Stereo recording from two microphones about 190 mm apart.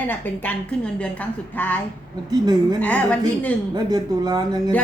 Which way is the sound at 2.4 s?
20° right (ahead or behind).